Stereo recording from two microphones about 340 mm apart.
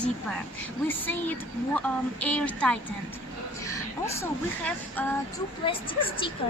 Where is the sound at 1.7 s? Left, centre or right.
Centre.